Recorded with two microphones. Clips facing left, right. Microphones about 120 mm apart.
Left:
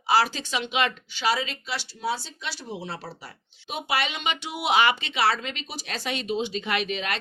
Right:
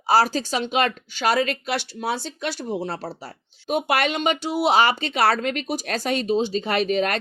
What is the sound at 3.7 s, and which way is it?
Speech, 50° right (ahead or behind).